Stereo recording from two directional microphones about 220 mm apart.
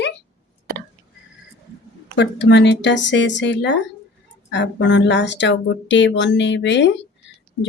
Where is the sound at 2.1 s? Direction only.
50° left (ahead or behind).